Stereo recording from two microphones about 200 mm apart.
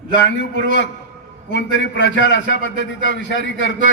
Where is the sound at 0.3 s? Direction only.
65° left (ahead or behind).